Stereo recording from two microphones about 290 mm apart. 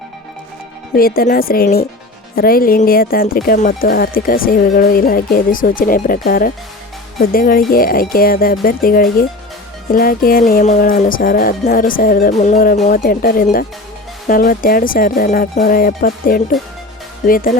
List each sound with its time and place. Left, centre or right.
0.9 s speech: left